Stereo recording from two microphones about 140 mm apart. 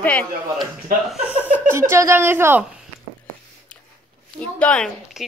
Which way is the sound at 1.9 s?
20° right (ahead or behind).